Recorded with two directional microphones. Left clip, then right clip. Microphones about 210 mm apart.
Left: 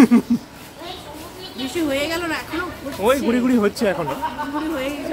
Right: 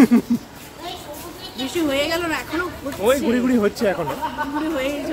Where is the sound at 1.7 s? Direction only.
10° right (ahead or behind).